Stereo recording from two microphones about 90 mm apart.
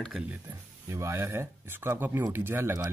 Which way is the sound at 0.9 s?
30° right (ahead or behind).